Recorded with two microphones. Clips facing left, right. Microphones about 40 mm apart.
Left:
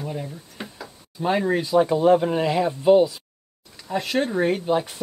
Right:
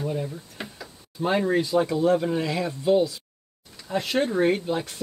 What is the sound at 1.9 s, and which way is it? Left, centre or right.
Speech, left.